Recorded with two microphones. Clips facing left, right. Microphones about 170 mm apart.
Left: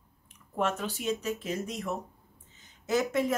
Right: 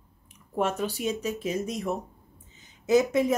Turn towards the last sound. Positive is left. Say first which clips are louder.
# right 6 dB
turn(degrees=-15)  # may be behind; listen again after turning